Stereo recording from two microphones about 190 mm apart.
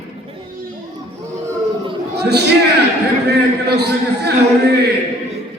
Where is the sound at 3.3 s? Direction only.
60° right (ahead or behind).